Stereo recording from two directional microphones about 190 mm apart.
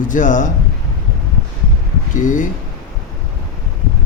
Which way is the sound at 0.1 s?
40° left (ahead or behind).